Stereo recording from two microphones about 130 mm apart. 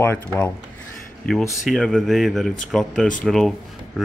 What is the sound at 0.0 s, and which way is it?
Speech, 15° left (ahead or behind).